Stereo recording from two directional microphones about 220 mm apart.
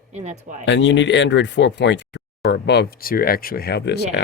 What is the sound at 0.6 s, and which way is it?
Speech, 55° left (ahead or behind).